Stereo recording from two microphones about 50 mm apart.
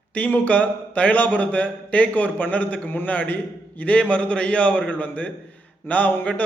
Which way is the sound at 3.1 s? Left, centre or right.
Left.